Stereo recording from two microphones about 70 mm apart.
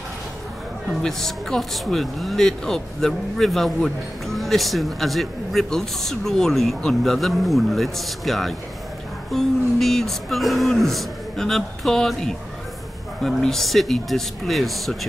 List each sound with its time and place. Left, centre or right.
0.8 s speech: centre